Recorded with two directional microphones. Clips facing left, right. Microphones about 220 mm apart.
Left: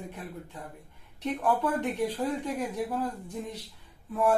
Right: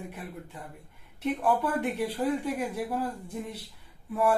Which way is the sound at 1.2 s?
10° right (ahead or behind).